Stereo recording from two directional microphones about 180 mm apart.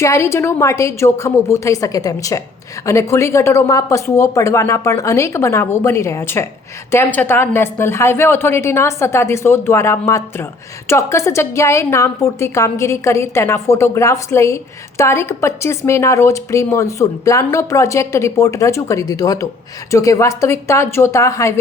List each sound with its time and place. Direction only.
0.0 s a woman's voice: 15° left (ahead or behind)